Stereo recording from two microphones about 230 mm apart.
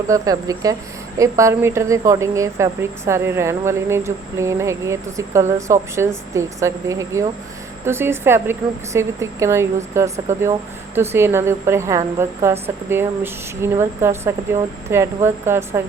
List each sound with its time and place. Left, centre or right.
0.1 s a woman's voice: centre